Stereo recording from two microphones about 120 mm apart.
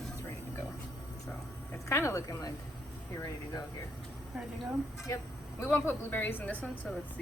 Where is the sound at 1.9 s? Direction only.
25° left (ahead or behind).